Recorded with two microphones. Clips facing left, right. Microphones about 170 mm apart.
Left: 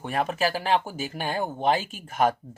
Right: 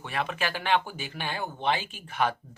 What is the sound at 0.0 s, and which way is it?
Speech, 45° left (ahead or behind).